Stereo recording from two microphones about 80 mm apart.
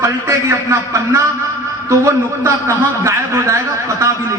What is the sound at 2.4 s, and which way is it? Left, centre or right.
A man's voice, right.